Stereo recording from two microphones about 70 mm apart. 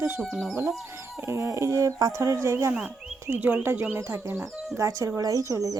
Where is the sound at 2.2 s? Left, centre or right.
Right.